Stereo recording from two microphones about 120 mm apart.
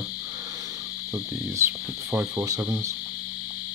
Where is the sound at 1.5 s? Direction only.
20° right (ahead or behind).